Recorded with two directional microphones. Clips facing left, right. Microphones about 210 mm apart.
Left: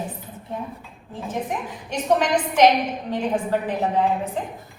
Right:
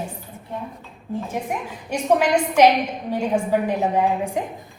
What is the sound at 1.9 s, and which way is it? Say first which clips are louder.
A woman's voice: right 2 dB; 10° right (ahead or behind).